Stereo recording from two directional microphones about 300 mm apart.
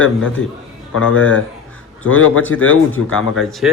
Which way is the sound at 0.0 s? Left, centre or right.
Left.